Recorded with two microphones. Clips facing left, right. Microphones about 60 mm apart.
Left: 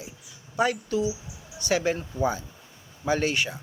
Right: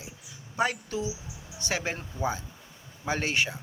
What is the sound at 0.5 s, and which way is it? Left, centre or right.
A man's voice, right.